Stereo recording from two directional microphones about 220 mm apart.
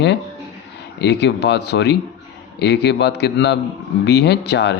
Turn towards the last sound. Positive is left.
turn(degrees=50)  # may be behind; listen again after turning